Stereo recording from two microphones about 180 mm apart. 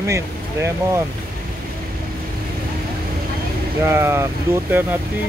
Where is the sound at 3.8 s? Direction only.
15° right (ahead or behind).